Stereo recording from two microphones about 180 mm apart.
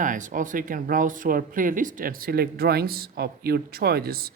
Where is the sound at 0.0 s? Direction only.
45° right (ahead or behind).